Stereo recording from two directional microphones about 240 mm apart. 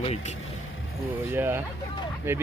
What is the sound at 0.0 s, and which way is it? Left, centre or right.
Speech, left.